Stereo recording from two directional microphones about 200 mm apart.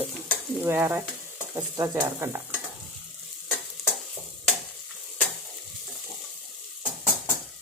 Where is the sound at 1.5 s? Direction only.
20° right (ahead or behind).